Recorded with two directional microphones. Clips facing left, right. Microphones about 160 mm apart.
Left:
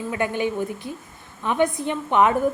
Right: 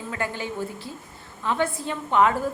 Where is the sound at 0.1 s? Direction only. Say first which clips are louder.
Left 6 dB; 20° left (ahead or behind).